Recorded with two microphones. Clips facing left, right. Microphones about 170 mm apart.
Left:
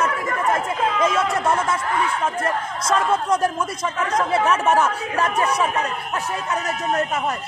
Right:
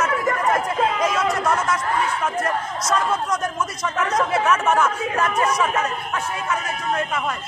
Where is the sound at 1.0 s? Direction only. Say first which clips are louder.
Left 1 dB; 30° left (ahead or behind).